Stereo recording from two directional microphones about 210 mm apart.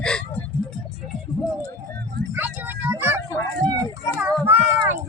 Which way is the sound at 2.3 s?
10° right (ahead or behind).